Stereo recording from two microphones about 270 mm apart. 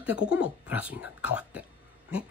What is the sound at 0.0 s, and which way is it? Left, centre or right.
Speech, centre.